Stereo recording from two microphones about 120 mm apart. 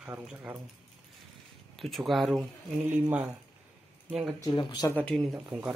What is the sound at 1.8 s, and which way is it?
Speech, centre (ahead or behind).